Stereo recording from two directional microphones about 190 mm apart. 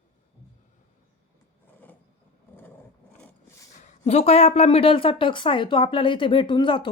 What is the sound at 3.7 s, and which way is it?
A woman's voice, 35° left (ahead or behind).